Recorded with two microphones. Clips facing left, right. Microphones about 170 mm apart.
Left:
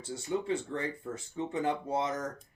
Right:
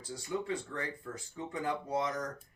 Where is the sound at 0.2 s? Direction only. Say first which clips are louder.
Left 4 dB; 25° left (ahead or behind).